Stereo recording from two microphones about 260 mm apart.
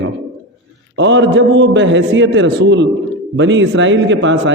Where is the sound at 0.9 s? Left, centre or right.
Right.